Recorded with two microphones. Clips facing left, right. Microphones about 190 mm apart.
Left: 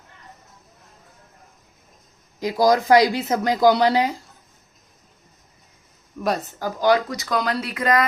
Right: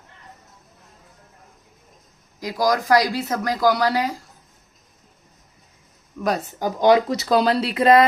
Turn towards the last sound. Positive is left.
turn(degrees=-30)  # may be behind; listen again after turning